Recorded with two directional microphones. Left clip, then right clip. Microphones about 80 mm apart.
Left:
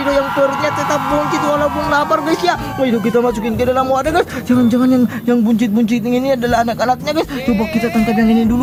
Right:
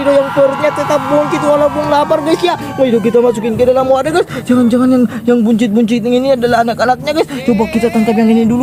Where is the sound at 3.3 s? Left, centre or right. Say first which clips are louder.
Right 5 dB; right.